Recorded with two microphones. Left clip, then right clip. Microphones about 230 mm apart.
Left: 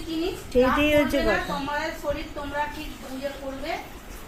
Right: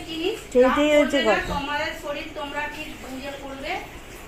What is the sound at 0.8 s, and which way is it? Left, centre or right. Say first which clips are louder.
Speech: right 3 dB; centre.